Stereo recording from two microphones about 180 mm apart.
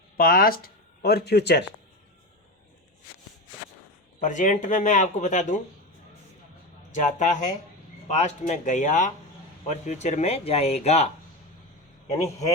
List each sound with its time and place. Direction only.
0.2 s speech: 55° left (ahead or behind)
4.2 s speech: 45° left (ahead or behind)
6.9 s speech: 40° left (ahead or behind)
12.1 s a man's voice: 20° left (ahead or behind)